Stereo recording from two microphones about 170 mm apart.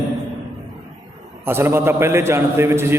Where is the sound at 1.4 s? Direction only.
15° right (ahead or behind).